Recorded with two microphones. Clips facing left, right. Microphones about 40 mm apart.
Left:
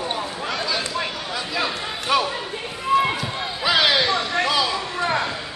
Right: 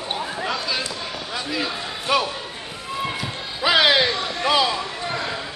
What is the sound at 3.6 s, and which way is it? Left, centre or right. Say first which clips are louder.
Music: right 2 dB; centre.